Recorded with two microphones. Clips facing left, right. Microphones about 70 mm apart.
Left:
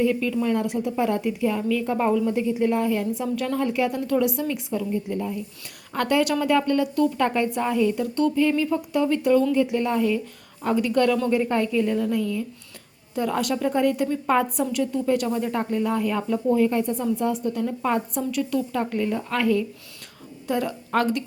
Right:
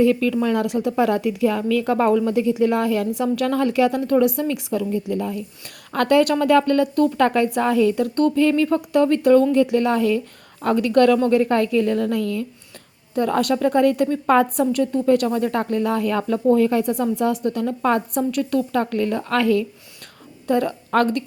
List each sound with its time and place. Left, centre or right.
0.0 s a woman's voice: right
3.3 s a woman's voice: right
4.0 s a woman's voice: right
4.4 s a woman's voice: right
5.9 s a woman's voice: right
7.3 s a woman's voice: right
10.6 s a woman's voice: right
13.1 s a woman's voice: right
18.2 s a woman's voice: right
20.5 s a woman's voice: right